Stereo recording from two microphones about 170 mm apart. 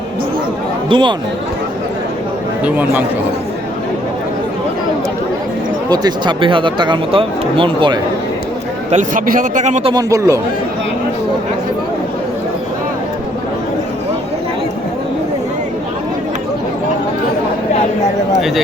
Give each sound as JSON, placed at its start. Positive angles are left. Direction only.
{"t": 0.9, "sound": "speech", "side_deg": -30}
{"t": 2.6, "sound": "speech", "side_deg": -10}
{"t": 5.9, "sound": "speech", "side_deg": -25}
{"t": 8.9, "sound": "a man's voice", "side_deg": -50}
{"t": 9.9, "sound": "speech", "side_deg": -20}
{"t": 18.3, "sound": "speech", "side_deg": 0}